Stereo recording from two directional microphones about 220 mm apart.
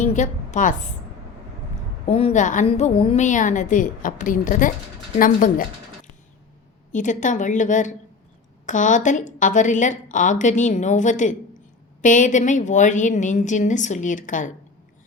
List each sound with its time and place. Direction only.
0.0 s a woman's voice: 35° left (ahead or behind)
2.0 s a woman's voice: 30° left (ahead or behind)
6.9 s a woman's voice: 35° left (ahead or behind)